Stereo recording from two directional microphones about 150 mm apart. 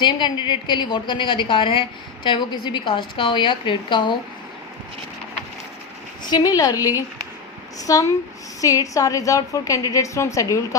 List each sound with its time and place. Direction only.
0.0 s a woman's voice: 30° left (ahead or behind)
6.2 s a woman's voice: 25° left (ahead or behind)